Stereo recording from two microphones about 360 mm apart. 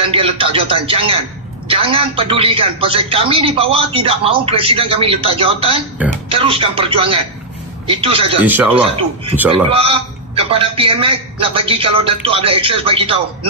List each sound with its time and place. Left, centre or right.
0.0 s a man's voice: centre
9.4 s a man's voice: centre